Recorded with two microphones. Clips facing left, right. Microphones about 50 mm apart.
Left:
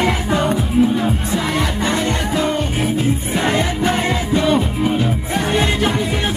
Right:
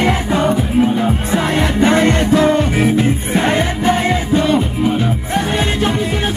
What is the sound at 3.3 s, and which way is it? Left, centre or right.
Music, right.